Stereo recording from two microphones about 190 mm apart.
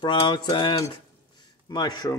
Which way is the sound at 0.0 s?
25° left (ahead or behind).